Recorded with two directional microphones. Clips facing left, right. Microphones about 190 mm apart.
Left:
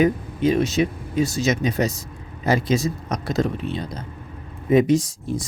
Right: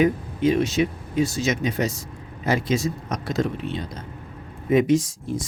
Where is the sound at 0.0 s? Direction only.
40° left (ahead or behind).